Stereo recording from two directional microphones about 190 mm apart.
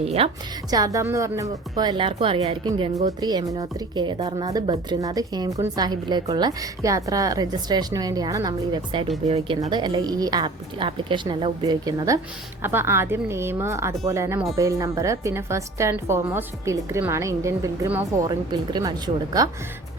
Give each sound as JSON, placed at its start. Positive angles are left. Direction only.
{"t": 0.0, "sound": "speech", "side_deg": -30}
{"t": 0.7, "sound": "a woman's voice", "side_deg": -20}
{"t": 9.6, "sound": "a woman's voice", "side_deg": -25}